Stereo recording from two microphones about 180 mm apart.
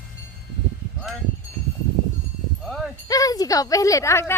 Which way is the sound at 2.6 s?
Centre (ahead or behind).